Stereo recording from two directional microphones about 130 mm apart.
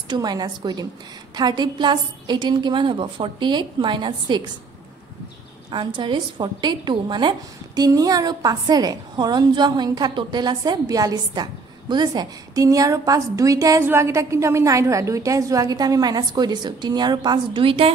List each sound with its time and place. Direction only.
0.1 s a woman's voice: 30° right (ahead or behind)
5.7 s a woman's voice: 35° right (ahead or behind)